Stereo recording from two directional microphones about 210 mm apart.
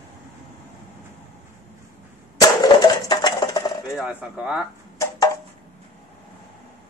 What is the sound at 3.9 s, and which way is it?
Speech, 5° right (ahead or behind).